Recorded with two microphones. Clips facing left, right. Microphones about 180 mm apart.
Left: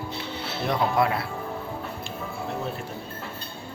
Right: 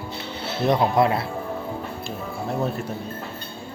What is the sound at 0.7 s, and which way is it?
Speech, 25° right (ahead or behind).